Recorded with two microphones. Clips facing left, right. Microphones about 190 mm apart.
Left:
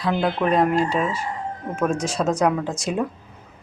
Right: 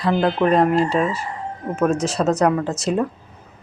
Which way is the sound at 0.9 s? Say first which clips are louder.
Right 3 dB; centre (ahead or behind).